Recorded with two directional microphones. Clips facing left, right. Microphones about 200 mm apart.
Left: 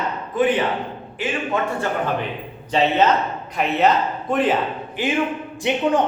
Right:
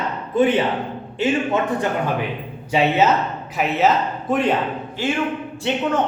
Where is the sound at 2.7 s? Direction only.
10° right (ahead or behind).